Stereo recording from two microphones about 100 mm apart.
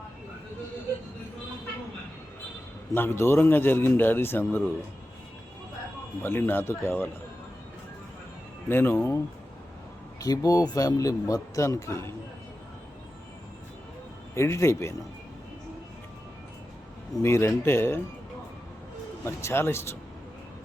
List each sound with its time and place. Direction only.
2.9 s a man's voice: 20° left (ahead or behind)
6.2 s a man's voice: 20° left (ahead or behind)
8.7 s a man's voice: 20° left (ahead or behind)
10.2 s speech: 35° left (ahead or behind)
14.3 s a man's voice: 30° left (ahead or behind)
17.2 s a man's voice: 25° left (ahead or behind)
19.2 s a man's voice: 25° left (ahead or behind)